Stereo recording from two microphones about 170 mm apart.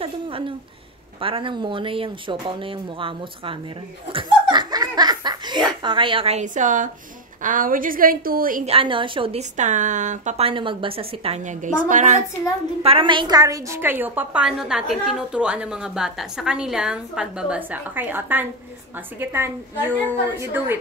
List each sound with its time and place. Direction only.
0.0 s a woman's voice: 30° right (ahead or behind)
4.1 s laughter: 30° right (ahead or behind)
5.7 s a woman's voice: 25° right (ahead or behind); by 8.6 s 55° right (ahead or behind)
8.6 s a woman's voice: 30° right (ahead or behind); by 12.2 s 45° right (ahead or behind)
12.8 s a woman's voice: 30° right (ahead or behind); by 20.7 s 10° right (ahead or behind)